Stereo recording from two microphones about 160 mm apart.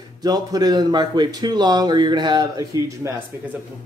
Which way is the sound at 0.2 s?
25° right (ahead or behind).